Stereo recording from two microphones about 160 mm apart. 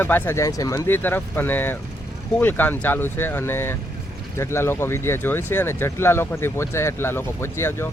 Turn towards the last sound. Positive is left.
turn(degrees=15)  # may be behind; listen again after turning